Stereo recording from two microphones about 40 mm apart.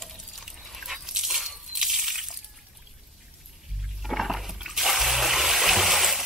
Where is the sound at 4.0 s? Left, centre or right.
Centre.